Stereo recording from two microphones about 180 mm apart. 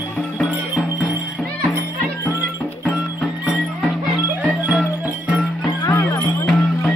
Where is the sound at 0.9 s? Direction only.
20° left (ahead or behind).